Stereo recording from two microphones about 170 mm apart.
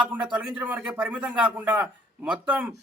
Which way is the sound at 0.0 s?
10° right (ahead or behind).